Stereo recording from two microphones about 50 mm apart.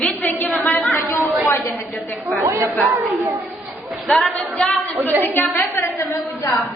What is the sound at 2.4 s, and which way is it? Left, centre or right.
Speech, right.